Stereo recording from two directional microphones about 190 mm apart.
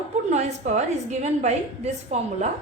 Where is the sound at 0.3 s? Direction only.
40° right (ahead or behind).